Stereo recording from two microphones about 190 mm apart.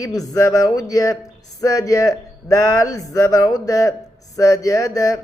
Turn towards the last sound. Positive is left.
turn(degrees=20)  # may be behind; listen again after turning